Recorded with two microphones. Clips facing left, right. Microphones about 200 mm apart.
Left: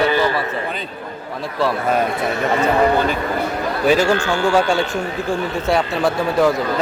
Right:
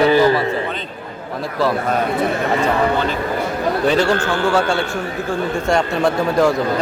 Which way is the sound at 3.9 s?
10° left (ahead or behind).